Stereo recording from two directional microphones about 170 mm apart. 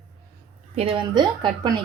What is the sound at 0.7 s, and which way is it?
A woman's voice, 30° right (ahead or behind).